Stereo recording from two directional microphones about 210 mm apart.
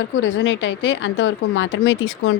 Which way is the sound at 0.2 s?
60° left (ahead or behind).